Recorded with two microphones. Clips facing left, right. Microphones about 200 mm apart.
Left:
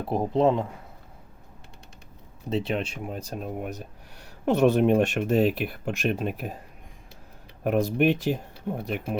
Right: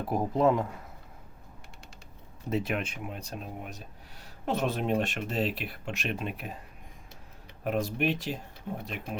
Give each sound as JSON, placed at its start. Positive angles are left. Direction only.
{"t": 0.0, "sound": "speech", "side_deg": 30}
{"t": 2.5, "sound": "speech", "side_deg": 30}
{"t": 7.6, "sound": "speech", "side_deg": 50}